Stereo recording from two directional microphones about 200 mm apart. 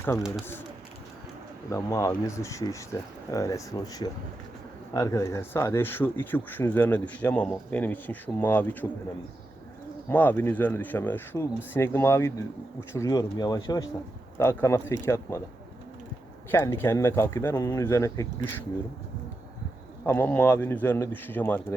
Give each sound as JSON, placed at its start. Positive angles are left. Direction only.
{"t": 1.7, "sound": "speech", "side_deg": 15}
{"t": 10.1, "sound": "speech", "side_deg": 10}
{"t": 16.5, "sound": "speech", "side_deg": 10}
{"t": 20.1, "sound": "speech", "side_deg": 10}